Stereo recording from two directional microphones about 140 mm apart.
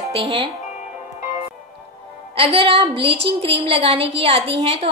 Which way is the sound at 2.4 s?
40° right (ahead or behind).